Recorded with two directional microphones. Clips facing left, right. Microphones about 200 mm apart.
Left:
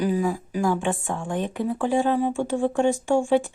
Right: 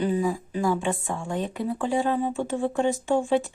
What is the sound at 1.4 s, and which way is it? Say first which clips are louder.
Speech: left 3 dB; 15° left (ahead or behind).